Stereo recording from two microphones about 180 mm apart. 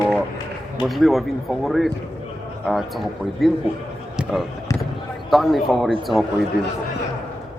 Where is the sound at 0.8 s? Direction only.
Centre (ahead or behind).